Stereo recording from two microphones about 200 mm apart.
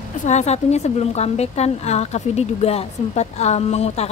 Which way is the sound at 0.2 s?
35° left (ahead or behind).